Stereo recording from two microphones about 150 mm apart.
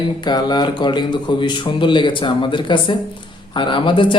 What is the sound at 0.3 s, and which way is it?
A man's voice, 30° left (ahead or behind).